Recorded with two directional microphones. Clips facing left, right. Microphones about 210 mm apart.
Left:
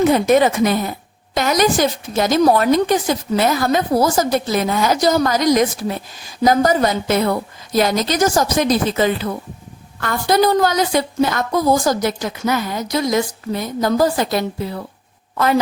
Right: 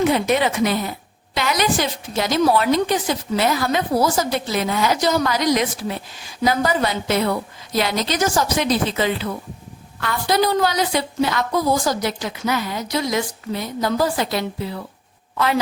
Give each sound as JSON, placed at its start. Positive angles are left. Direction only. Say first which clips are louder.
{"t": 0.0, "sound": "a woman's voice", "louder": "left 5 dB", "side_deg": 45}